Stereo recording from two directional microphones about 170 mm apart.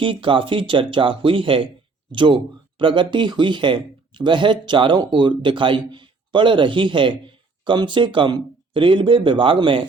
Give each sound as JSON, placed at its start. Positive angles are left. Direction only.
{"t": 0.0, "sound": "speech", "side_deg": -30}